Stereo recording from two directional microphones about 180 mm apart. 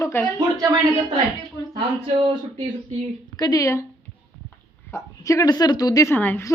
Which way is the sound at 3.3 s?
20° left (ahead or behind).